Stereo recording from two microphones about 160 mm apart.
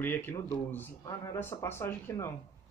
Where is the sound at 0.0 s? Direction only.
15° left (ahead or behind).